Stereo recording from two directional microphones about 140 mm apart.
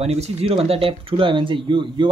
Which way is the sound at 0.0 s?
50° right (ahead or behind).